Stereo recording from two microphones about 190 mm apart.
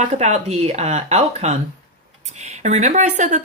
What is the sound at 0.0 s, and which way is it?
Speech, 35° right (ahead or behind).